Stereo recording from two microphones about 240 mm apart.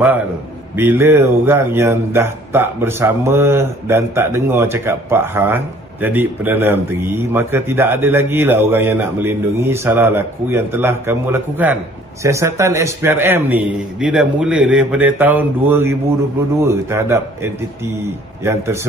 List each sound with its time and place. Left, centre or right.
0.7 s speech: centre